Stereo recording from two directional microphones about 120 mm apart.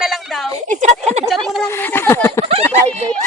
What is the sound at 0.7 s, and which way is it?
Speech, 85° right.